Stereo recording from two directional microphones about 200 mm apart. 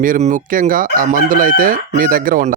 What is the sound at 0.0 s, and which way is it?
Crowing, 40° right (ahead or behind).